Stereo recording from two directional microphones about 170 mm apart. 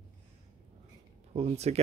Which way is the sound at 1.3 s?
40° right (ahead or behind).